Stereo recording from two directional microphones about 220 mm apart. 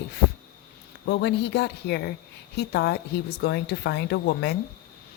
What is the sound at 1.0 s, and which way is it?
A woman's voice, 50° left (ahead or behind).